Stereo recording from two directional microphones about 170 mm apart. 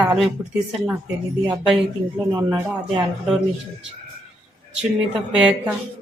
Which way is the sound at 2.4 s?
25° right (ahead or behind).